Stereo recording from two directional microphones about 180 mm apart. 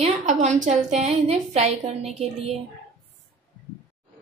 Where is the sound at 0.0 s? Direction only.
40° right (ahead or behind).